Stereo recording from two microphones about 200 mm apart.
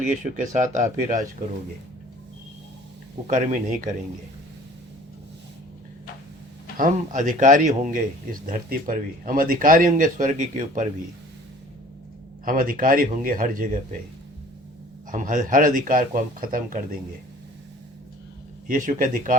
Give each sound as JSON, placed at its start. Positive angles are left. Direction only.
{"t": 0.5, "sound": "a man's voice", "side_deg": -40}
{"t": 3.2, "sound": "a man's voice", "side_deg": -40}
{"t": 6.7, "sound": "a man's voice", "side_deg": -40}
{"t": 12.5, "sound": "speech", "side_deg": -45}
{"t": 15.1, "sound": "a man's voice", "side_deg": -40}
{"t": 18.7, "sound": "a man's voice", "side_deg": -40}